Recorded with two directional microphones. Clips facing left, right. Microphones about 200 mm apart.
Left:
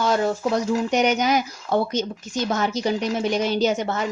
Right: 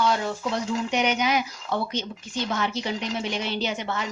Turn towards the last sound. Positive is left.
turn(degrees=45)  # may be behind; listen again after turning